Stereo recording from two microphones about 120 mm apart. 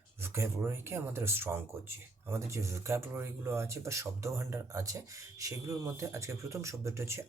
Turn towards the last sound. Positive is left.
turn(degrees=-20)  # may be behind; listen again after turning